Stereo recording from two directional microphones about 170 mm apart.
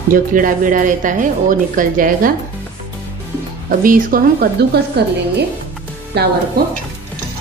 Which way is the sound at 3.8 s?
55° right (ahead or behind).